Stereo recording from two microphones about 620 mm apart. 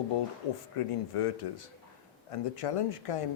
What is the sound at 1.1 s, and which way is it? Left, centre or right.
Speech, left.